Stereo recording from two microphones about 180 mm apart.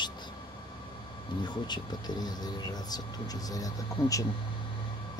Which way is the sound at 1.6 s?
25° left (ahead or behind).